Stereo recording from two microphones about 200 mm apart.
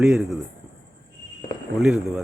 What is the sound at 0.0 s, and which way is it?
Speech, centre (ahead or behind).